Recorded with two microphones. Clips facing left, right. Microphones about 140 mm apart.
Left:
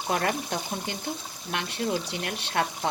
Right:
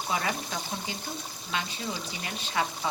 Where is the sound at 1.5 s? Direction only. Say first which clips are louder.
Left 5 dB; 70° left (ahead or behind).